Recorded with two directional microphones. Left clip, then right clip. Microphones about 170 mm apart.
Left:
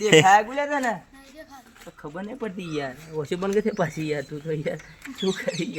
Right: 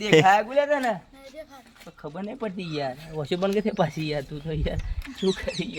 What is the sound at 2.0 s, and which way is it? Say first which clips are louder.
Speech: even; 45° right (ahead or behind).